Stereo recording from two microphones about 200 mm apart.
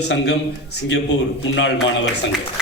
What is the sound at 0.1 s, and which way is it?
Speech, 60° left (ahead or behind).